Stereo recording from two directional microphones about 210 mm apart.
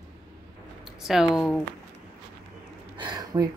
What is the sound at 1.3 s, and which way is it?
Speech, 5° left (ahead or behind).